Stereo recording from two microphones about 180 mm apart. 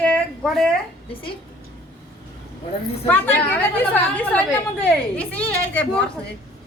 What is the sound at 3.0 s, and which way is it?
A woman's voice, 10° left (ahead or behind).